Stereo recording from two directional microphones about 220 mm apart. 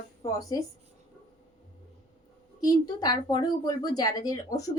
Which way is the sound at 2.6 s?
15° left (ahead or behind).